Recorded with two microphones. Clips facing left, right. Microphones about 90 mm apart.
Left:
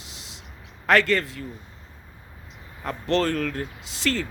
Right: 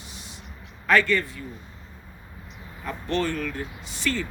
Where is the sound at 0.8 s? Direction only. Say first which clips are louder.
Left 1 dB; 85° left.